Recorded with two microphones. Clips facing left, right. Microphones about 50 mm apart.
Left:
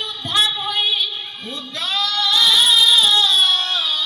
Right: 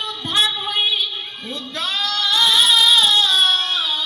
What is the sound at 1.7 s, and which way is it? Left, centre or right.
Singing, right.